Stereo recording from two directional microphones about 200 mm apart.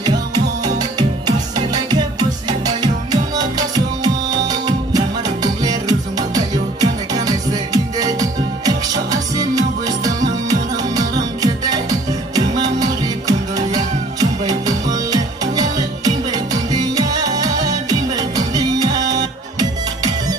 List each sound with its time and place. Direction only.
0.0 s music: 20° right (ahead or behind)